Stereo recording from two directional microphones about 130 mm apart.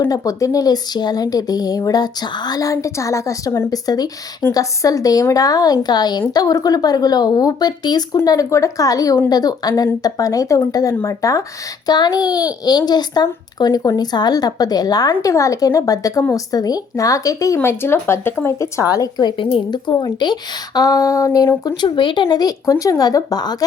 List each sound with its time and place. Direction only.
0.1 s speech: 25° left (ahead or behind)